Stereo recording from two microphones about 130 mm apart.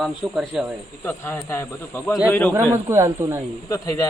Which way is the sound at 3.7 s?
25° left (ahead or behind).